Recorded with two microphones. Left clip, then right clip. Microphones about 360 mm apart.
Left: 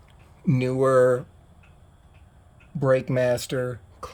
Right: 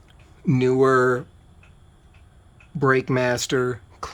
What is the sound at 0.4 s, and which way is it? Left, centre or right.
Speech, centre.